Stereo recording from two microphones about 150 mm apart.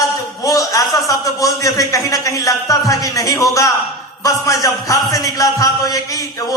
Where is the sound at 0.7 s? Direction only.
25° left (ahead or behind).